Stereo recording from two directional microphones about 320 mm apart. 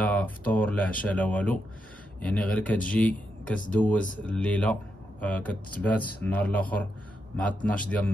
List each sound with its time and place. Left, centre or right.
0.0 s a man's voice: centre